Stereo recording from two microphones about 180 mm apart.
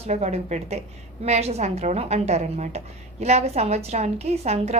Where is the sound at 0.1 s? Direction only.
35° right (ahead or behind).